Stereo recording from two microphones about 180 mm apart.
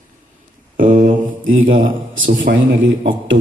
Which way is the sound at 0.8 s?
45° right (ahead or behind).